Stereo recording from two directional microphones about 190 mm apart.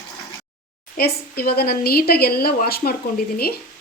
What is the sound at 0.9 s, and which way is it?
A woman's voice, 55° left (ahead or behind).